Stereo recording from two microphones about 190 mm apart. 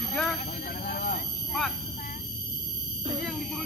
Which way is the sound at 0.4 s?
50° left (ahead or behind).